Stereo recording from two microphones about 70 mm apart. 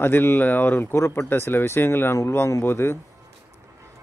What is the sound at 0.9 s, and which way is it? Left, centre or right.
A man's voice, left.